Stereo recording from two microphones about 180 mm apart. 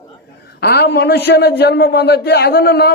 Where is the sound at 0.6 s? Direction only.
60° left (ahead or behind).